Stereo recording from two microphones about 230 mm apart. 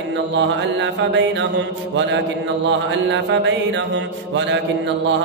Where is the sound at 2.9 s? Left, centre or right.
Right.